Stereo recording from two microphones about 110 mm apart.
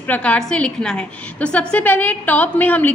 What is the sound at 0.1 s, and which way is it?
A woman's voice, 10° left (ahead or behind).